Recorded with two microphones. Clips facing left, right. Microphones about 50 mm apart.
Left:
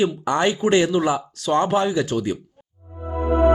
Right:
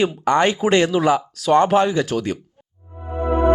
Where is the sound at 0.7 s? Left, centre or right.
Right.